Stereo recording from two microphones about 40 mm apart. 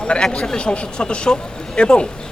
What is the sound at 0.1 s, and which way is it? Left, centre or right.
Speech, left.